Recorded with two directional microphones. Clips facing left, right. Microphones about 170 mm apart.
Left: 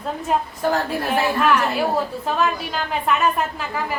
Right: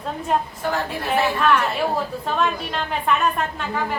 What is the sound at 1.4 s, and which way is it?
A woman's voice, 5° left (ahead or behind).